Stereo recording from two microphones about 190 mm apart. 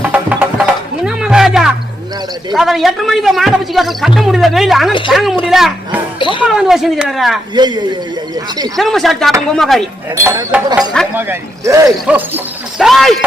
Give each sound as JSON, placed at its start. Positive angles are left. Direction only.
{"t": 0.0, "sound": "music", "side_deg": -10}
{"t": 2.5, "sound": "speech", "side_deg": 0}
{"t": 6.1, "sound": "speech", "side_deg": 25}
{"t": 6.4, "sound": "speech", "side_deg": -5}
{"t": 7.5, "sound": "a man's voice", "side_deg": -25}
{"t": 8.7, "sound": "speech", "side_deg": 0}
{"t": 10.2, "sound": "speech", "side_deg": -15}